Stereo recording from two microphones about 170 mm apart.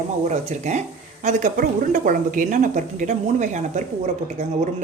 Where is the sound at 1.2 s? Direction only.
50° right (ahead or behind).